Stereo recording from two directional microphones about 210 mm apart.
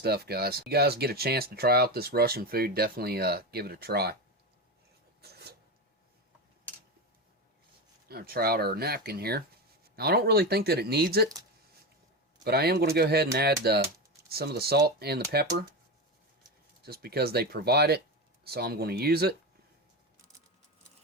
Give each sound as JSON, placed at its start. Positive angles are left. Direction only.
{"t": 0.0, "sound": "speech", "side_deg": -50}
{"t": 5.2, "sound": "filing", "side_deg": -50}
{"t": 8.0, "sound": "speech", "side_deg": -45}
{"t": 12.5, "sound": "speech", "side_deg": -50}
{"t": 16.8, "sound": "speech", "side_deg": -50}